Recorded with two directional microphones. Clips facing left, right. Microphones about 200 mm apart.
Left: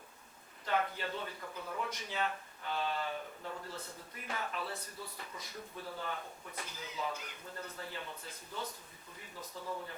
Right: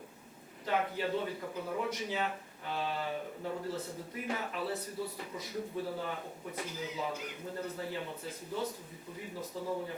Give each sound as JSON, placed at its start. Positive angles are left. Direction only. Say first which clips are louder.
{"t": 0.6, "sound": "speech", "louder": "right 3 dB", "side_deg": -10}
{"t": 9.6, "sound": "speech", "louder": "right 5 dB", "side_deg": -30}